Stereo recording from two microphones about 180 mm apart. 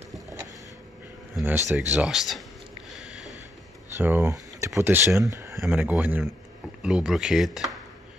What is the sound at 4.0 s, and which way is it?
Speech, 10° right (ahead or behind).